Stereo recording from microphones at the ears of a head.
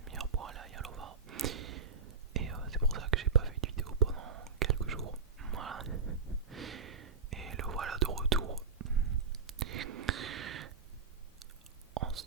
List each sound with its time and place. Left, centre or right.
0.0 s whispering: right